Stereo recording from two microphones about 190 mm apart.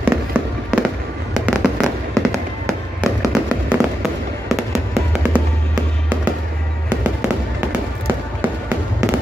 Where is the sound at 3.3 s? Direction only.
5° right (ahead or behind).